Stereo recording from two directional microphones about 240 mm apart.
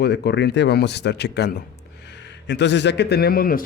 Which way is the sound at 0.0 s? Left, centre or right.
Left.